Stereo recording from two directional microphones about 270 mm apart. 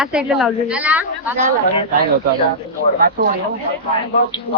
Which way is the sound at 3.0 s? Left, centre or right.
Right.